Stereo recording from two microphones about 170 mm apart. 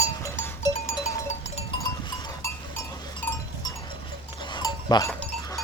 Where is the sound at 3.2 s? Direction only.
10° left (ahead or behind).